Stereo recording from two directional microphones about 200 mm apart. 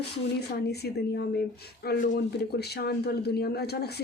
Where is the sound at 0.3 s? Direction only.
55° left (ahead or behind).